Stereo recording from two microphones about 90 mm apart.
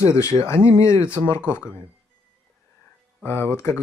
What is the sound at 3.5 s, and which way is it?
Speech, 30° left (ahead or behind).